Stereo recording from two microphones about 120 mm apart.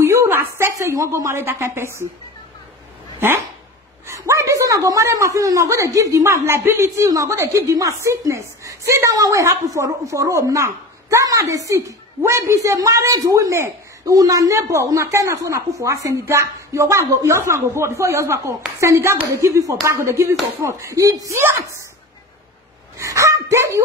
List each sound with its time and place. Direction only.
0.0 s a woman's voice: 20° right (ahead or behind)
4.1 s a woman's voice: 25° right (ahead or behind)
22.9 s speech: 25° right (ahead or behind)